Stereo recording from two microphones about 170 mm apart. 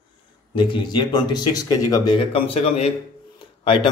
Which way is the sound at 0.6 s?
25° left (ahead or behind).